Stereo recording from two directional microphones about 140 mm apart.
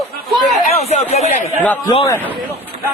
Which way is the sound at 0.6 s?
50° left (ahead or behind).